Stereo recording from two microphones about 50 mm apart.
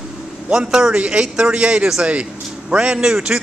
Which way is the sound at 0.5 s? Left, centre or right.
Centre.